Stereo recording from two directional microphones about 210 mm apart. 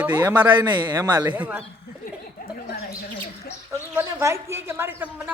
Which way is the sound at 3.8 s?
10° right (ahead or behind).